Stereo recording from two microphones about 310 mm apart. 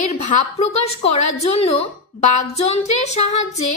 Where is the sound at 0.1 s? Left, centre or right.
Left.